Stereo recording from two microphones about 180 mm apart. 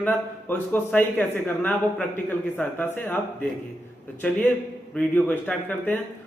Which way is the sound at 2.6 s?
10° left (ahead or behind).